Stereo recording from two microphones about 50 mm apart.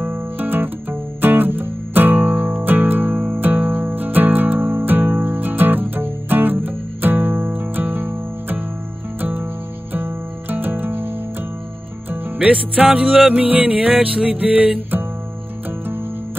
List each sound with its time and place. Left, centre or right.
0.0 s music: right
12.4 s music: right
13.9 s music: centre